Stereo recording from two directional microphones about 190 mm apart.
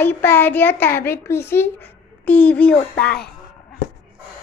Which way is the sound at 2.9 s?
55° left (ahead or behind).